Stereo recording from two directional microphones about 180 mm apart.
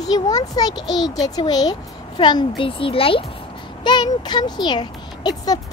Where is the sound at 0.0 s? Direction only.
20° left (ahead or behind).